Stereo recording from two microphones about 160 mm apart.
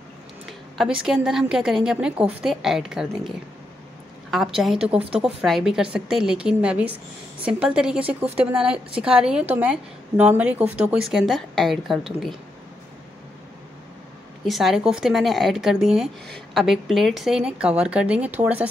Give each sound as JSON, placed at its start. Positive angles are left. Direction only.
{"t": 0.5, "sound": "speech", "side_deg": -5}
{"t": 4.6, "sound": "a woman's voice", "side_deg": -5}
{"t": 14.4, "sound": "speech", "side_deg": 0}